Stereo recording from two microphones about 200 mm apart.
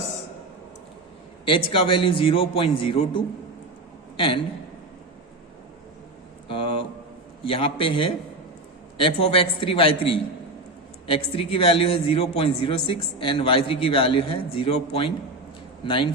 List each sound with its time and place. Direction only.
1.5 s a man's voice: 25° left (ahead or behind)
6.5 s a man's voice: 25° left (ahead or behind)
11.0 s a man's voice: 25° left (ahead or behind)